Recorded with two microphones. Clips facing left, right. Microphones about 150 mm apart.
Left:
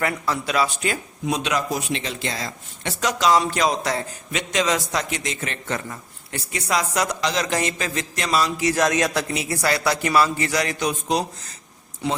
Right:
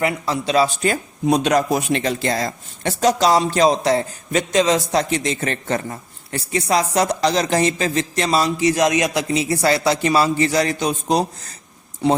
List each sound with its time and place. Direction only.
0.0 s speech: 25° right (ahead or behind)